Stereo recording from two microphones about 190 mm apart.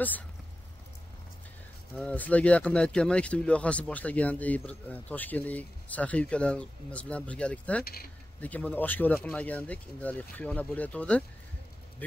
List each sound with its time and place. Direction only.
2.0 s speech: 5° left (ahead or behind)
7.8 s speech: 50° left (ahead or behind)
8.4 s speech: 10° left (ahead or behind)